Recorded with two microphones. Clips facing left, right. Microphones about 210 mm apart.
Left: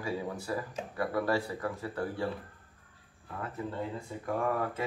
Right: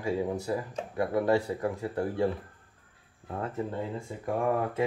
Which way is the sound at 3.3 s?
25° right (ahead or behind).